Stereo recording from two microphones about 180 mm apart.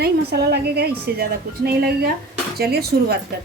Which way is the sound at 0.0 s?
65° right (ahead or behind).